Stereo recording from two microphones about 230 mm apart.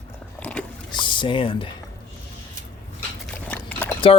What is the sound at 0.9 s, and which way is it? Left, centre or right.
Speech, left.